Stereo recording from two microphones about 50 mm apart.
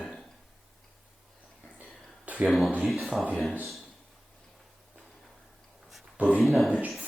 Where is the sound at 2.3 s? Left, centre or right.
Right.